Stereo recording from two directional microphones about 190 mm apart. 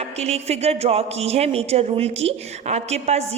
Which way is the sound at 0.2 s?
35° right (ahead or behind).